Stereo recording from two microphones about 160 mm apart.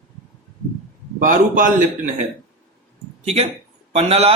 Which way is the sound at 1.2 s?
55° right (ahead or behind).